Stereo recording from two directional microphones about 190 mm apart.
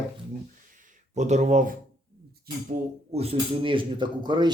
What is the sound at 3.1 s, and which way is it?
A man's voice, 30° right (ahead or behind).